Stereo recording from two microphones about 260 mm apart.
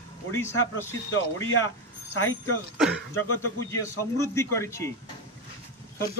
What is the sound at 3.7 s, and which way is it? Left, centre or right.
A man's voice, centre.